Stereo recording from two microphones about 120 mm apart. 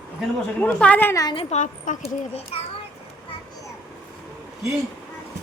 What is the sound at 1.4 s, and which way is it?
Speech, 75° left (ahead or behind).